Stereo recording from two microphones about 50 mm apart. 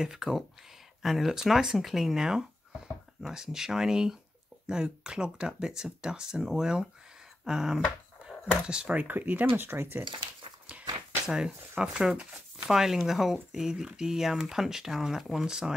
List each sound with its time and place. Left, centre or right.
0.0 s speech: centre
9.0 s speech: right
9.5 s speech: right
10.7 s a sound: right
11.2 s speech: centre